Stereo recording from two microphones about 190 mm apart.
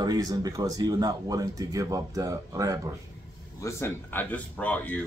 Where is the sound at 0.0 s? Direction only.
20° right (ahead or behind).